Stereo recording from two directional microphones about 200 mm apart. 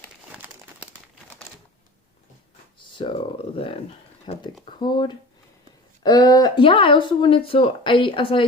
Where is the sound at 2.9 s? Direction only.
25° left (ahead or behind).